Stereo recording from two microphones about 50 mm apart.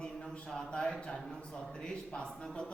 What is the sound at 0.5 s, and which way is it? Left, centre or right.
A man's voice, centre.